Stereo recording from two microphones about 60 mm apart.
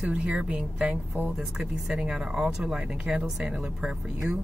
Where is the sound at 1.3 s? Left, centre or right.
Centre.